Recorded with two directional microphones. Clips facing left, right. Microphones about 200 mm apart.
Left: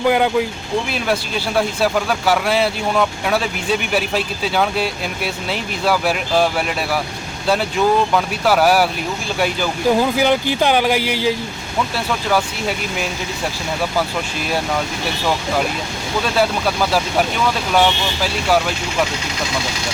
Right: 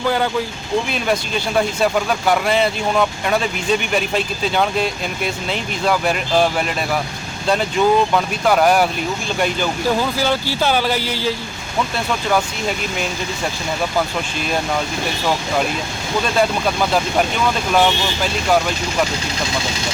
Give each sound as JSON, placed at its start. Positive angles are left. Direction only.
{"t": 0.0, "sound": "speech", "side_deg": 15}
{"t": 0.9, "sound": "speech", "side_deg": 5}
{"t": 16.2, "sound": "speech", "side_deg": 5}